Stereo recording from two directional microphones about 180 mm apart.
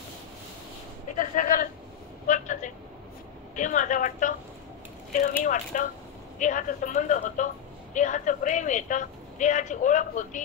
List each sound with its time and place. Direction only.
1.1 s a sound: 45° left (ahead or behind)
2.2 s vehicle: 45° left (ahead or behind)
3.5 s a woman's voice: 45° left (ahead or behind)
5.4 s a woman's voice: 45° left (ahead or behind)